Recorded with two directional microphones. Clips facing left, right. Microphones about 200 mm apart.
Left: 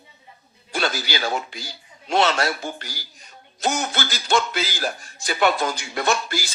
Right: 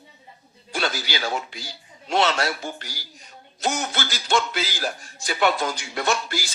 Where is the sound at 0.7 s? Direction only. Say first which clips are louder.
Left 2 dB; 45° left (ahead or behind).